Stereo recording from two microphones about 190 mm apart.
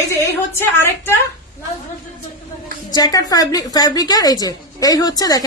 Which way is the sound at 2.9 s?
20° left (ahead or behind).